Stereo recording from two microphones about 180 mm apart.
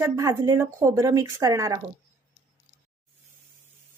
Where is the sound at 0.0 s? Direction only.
20° right (ahead or behind).